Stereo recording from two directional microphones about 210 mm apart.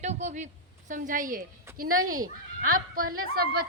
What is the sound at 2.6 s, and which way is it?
Speech, 40° right (ahead or behind).